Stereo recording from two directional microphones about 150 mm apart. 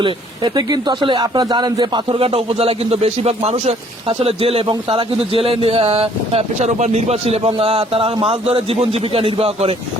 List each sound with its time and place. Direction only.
0.0 s speech: 30° right (ahead or behind)